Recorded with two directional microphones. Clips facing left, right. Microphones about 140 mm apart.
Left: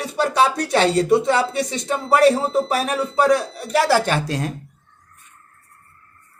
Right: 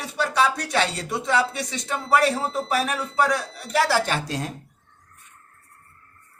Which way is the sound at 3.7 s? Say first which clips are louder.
Left 4 dB; 55° left (ahead or behind).